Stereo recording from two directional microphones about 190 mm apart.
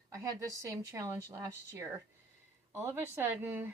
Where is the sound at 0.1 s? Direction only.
15° right (ahead or behind).